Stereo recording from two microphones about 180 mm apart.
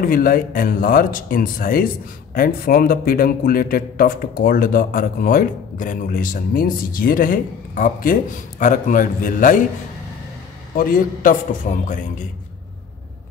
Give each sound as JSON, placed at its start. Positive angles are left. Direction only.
{"t": 0.0, "sound": "a man's voice", "side_deg": 55}
{"t": 10.8, "sound": "a man's voice", "side_deg": 50}